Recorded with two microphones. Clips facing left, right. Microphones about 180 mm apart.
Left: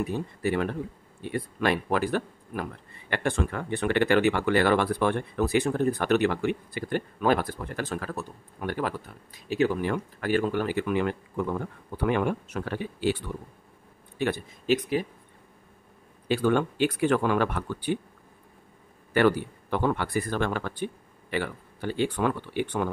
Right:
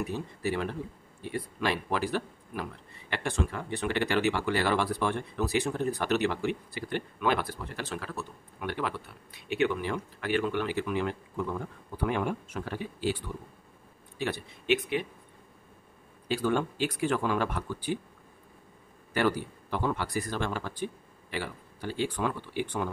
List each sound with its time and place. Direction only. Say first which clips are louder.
0.0 s speech: left 4 dB; 55° left (ahead or behind)
7.2 s speech: left 4 dB; 45° left (ahead or behind); by 13.2 s 70° left (ahead or behind)
14.1 s a man's voice: left 5 dB; 55° left (ahead or behind)
14.7 s speech: left 3 dB; 40° left (ahead or behind)
16.3 s speech: left 4 dB; 60° left (ahead or behind)
19.1 s speech: left 6 dB; 60° left (ahead or behind)